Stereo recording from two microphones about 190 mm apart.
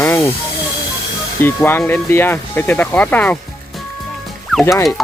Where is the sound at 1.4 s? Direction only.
10° left (ahead or behind).